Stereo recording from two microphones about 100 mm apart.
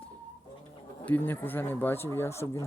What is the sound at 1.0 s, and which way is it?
Speech, 20° left (ahead or behind).